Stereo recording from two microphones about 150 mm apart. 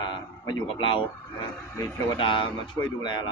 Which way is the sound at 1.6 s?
15° left (ahead or behind).